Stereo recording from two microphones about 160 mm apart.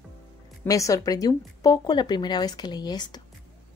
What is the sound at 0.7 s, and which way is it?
A woman's voice, 20° left (ahead or behind).